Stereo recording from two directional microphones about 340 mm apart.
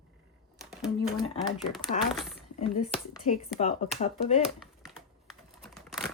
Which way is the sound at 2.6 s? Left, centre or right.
Centre.